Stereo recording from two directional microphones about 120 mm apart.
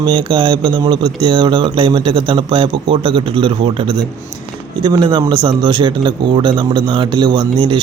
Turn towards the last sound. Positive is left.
turn(degrees=-45)  # may be behind; listen again after turning